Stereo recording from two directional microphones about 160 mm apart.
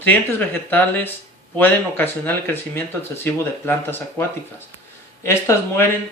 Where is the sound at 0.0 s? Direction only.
10° left (ahead or behind).